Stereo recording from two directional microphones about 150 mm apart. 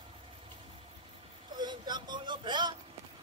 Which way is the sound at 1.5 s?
30° right (ahead or behind).